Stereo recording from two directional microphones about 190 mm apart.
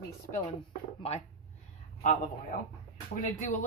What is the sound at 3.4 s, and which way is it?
Speech, 40° left (ahead or behind).